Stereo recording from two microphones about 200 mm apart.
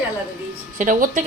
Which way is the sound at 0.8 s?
40° right (ahead or behind).